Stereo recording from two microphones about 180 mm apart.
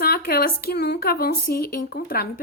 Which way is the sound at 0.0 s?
60° left (ahead or behind).